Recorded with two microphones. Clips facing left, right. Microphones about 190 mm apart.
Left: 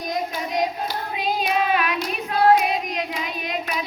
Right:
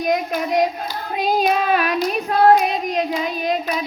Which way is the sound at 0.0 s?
65° right (ahead or behind).